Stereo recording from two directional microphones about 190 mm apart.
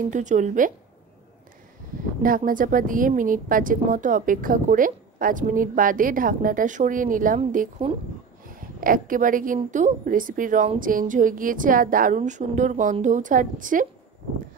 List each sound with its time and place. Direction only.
0.1 s a woman's voice: 40° right (ahead or behind)
2.2 s speech: 45° right (ahead or behind)